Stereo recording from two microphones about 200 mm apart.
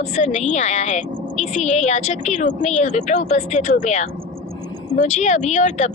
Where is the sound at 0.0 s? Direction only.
35° left (ahead or behind).